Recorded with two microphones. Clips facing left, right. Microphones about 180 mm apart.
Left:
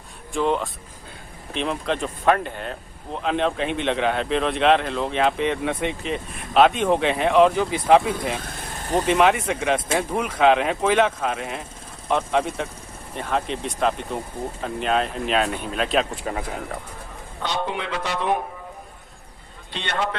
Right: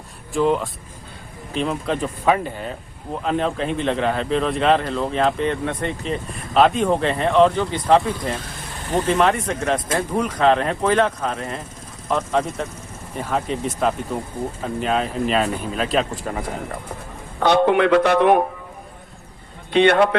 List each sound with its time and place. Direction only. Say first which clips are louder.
0.3 s speech: right 3 dB; centre (ahead or behind)
8.4 s vehicle: even; 45° left (ahead or behind)
9.0 s speech: even; 5° left (ahead or behind)
13.1 s speech: right 2 dB; 5° right (ahead or behind)
17.4 s a man's voice: right 12 dB; 60° right (ahead or behind)
19.7 s a man's voice: right 13 dB; 60° right (ahead or behind)